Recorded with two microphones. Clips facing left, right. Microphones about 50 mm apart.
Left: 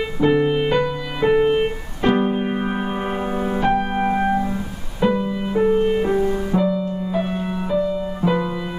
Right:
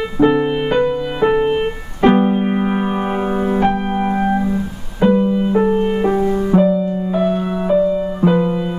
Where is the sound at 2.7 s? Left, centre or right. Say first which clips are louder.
Right 5 dB; right.